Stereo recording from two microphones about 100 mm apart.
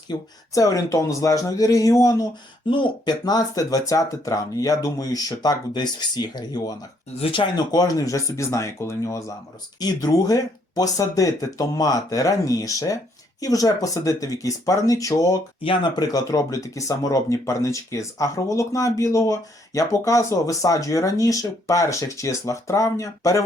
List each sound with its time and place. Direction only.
0.1 s speech: 35° left (ahead or behind)
2.6 s speech: 55° left (ahead or behind)
7.2 s speech: 60° left (ahead or behind)
7.5 s speech: 40° left (ahead or behind)
15.6 s speech: 60° left (ahead or behind)
16.0 s speech: 40° left (ahead or behind)